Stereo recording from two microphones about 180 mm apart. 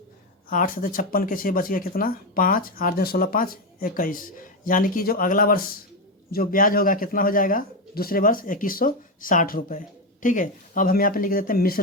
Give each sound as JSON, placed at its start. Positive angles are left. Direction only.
{"t": 0.5, "sound": "speech", "side_deg": 50}